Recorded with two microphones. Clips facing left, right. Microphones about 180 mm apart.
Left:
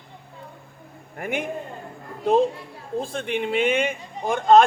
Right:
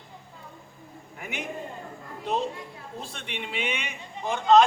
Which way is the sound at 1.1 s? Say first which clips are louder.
Left 9 dB; 50° left (ahead or behind).